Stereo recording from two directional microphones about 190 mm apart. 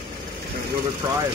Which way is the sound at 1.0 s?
20° right (ahead or behind).